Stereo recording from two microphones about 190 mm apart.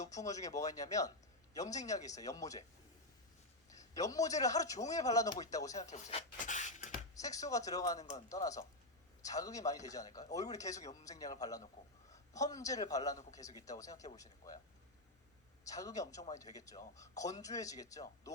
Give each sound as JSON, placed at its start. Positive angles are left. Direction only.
{"t": 0.1, "sound": "a man's voice", "side_deg": 20}
{"t": 3.7, "sound": "a man's voice", "side_deg": 20}
{"t": 5.9, "sound": "speech", "side_deg": 35}
{"t": 7.2, "sound": "a man's voice", "side_deg": 20}
{"t": 15.6, "sound": "a man's voice", "side_deg": 20}